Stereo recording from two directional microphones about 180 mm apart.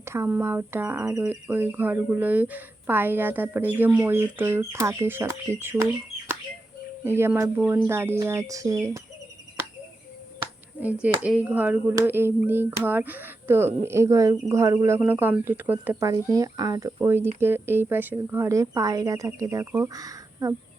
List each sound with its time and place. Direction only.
0.0 s speech: 15° right (ahead or behind)
7.2 s speech: 15° right (ahead or behind)
11.0 s speech: 5° right (ahead or behind)